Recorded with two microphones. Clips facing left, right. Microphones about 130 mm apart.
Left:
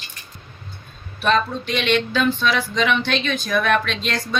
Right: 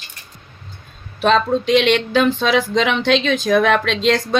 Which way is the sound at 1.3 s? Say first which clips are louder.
Right 5 dB; 90° right.